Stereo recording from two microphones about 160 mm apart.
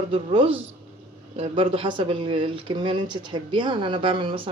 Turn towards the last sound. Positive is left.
turn(degrees=-35)  # may be behind; listen again after turning